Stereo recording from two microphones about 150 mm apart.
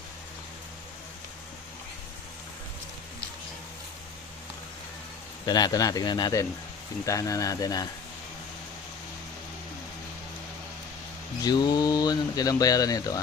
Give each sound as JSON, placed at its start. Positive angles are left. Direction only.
{"t": 5.5, "sound": "speech", "side_deg": 25}
{"t": 11.4, "sound": "speech", "side_deg": 30}